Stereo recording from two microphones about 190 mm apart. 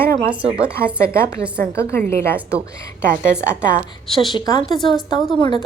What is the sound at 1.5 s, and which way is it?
Speech, 60° right (ahead or behind).